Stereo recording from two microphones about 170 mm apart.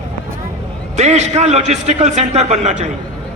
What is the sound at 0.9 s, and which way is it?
A man's voice, 40° right (ahead or behind).